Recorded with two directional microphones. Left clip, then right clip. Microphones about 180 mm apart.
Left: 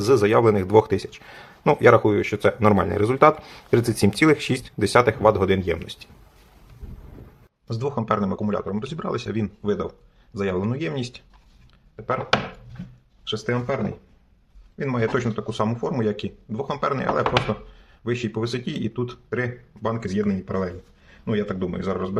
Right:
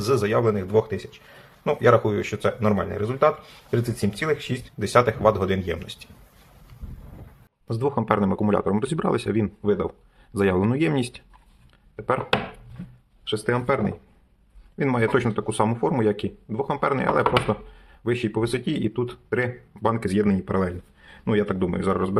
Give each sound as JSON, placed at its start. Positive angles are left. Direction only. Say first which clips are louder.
{"t": 0.0, "sound": "speech", "louder": "left 4 dB", "side_deg": 20}
{"t": 1.9, "sound": "speech", "louder": "left 1 dB", "side_deg": 15}
{"t": 7.7, "sound": "a man's voice", "louder": "right 1 dB", "side_deg": -10}
{"t": 10.3, "sound": "a man's voice", "louder": "right 4 dB", "side_deg": -20}
{"t": 14.8, "sound": "a man's voice", "louder": "right 2 dB", "side_deg": -20}